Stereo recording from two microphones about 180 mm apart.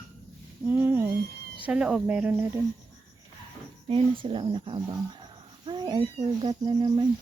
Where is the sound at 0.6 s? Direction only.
10° right (ahead or behind).